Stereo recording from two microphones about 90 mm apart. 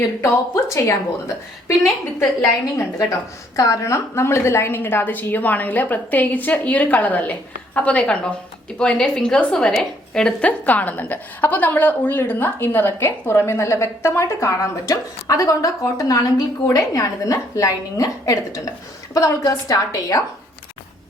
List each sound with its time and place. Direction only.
0.2 s a woman's voice: 35° left (ahead or behind)